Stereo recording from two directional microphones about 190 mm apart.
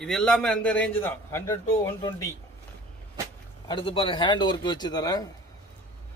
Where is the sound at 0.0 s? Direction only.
5° left (ahead or behind).